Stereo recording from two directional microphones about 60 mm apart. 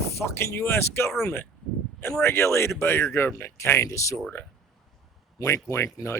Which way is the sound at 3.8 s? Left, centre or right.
Left.